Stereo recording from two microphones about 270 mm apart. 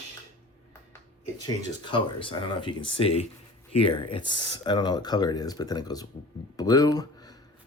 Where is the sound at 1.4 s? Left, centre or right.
Centre.